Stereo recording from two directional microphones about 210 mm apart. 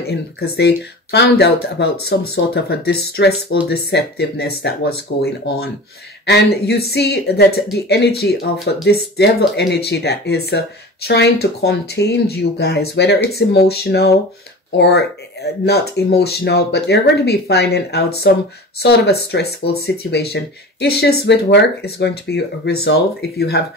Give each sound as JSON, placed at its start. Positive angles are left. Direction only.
{"t": 0.0, "sound": "speech", "side_deg": 50}